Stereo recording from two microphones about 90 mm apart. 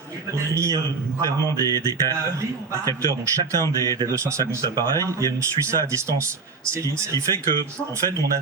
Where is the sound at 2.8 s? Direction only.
40° right (ahead or behind).